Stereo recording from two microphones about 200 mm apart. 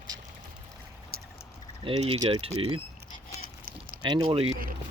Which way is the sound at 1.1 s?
45° right (ahead or behind).